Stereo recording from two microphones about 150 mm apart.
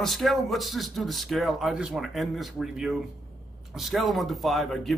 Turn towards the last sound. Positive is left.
turn(degrees=0)  # may be behind; listen again after turning